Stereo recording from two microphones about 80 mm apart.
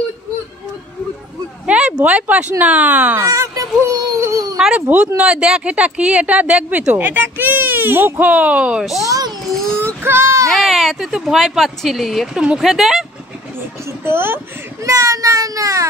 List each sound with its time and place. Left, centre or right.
1.7 s a sound: centre
2.6 s speech: centre
3.3 s speech: right
4.7 s speech: centre
9.0 s a child's voice: right
9.5 s a sound: centre
9.8 s child singing: right
10.5 s speech: centre
13.8 s speech: right
14.8 s a child's voice: right